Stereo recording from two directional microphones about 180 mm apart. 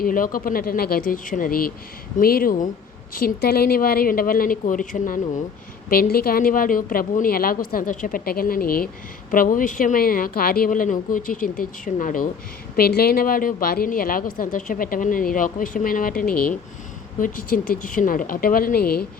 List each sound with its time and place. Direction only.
0.0 s a woman's voice: 50° left (ahead or behind)
12.7 s a woman's voice: 60° left (ahead or behind)